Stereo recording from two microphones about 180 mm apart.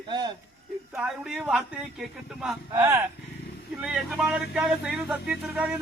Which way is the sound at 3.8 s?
5° right (ahead or behind).